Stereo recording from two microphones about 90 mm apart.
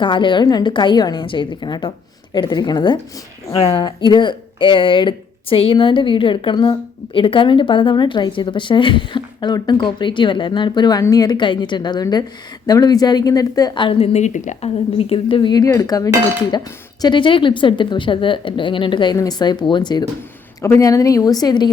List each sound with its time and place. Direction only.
0.0 s speech: 65° left (ahead or behind); by 13.7 s 40° left (ahead or behind)
13.7 s a woman's voice: 75° left (ahead or behind); by 15.6 s 60° left (ahead or behind)
15.6 s a woman's voice: 40° left (ahead or behind)
17.2 s speech: 65° left (ahead or behind)
19.1 s speech: 45° left (ahead or behind)
20.7 s a woman's voice: 40° left (ahead or behind)